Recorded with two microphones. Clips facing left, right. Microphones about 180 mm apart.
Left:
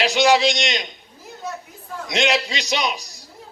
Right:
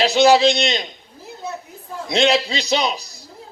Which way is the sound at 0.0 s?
35° right (ahead or behind).